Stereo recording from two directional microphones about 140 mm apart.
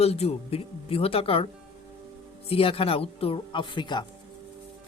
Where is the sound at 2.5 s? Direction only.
40° left (ahead or behind).